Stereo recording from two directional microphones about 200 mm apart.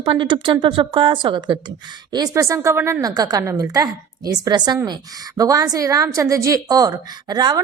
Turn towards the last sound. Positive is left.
turn(degrees=-20)  # may be behind; listen again after turning